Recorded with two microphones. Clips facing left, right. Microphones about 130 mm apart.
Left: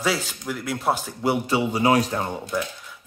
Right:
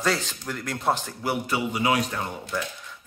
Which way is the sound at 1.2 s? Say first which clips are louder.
Left 6 dB; 25° left (ahead or behind).